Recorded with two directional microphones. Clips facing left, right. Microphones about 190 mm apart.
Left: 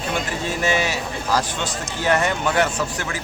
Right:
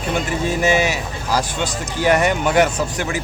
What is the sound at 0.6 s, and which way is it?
Speech, 15° right (ahead or behind).